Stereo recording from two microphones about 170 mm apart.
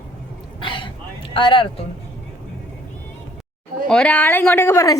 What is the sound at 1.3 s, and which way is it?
Speech, 30° left (ahead or behind).